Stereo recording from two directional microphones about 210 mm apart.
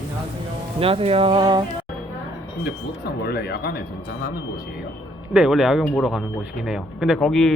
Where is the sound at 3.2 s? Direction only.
50° left (ahead or behind).